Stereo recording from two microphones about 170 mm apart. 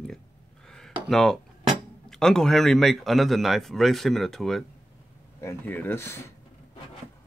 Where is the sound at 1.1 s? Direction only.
Centre (ahead or behind).